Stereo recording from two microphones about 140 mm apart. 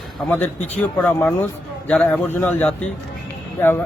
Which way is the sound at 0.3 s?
10° left (ahead or behind).